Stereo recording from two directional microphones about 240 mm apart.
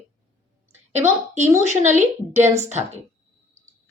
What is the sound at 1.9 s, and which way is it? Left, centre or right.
Speech, right.